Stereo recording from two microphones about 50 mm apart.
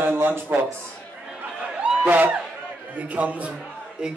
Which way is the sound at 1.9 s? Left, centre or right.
Right.